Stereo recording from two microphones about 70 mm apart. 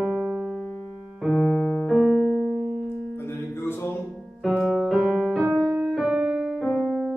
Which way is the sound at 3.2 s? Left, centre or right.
Left.